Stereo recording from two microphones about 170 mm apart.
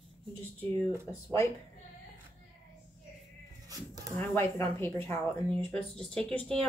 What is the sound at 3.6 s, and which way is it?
Cat, 20° right (ahead or behind).